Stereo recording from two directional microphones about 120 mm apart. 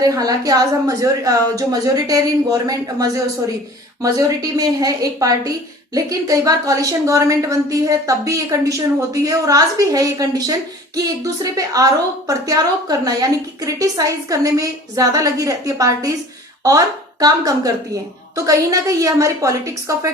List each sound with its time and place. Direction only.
0.0 s a woman's voice: 30° right (ahead or behind)